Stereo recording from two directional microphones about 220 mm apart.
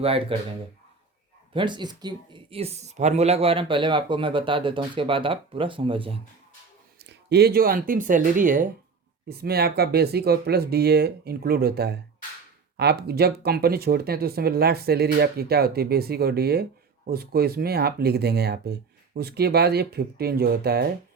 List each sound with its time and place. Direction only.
0.0 s speech: 25° right (ahead or behind)
1.5 s speech: 20° right (ahead or behind)
7.0 s speech: 50° right (ahead or behind)